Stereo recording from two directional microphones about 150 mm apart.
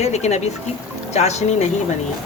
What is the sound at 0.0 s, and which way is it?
Speech, 50° left (ahead or behind).